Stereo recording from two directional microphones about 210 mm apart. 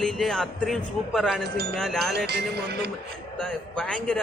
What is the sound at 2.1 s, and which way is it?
Speech, 50° right (ahead or behind).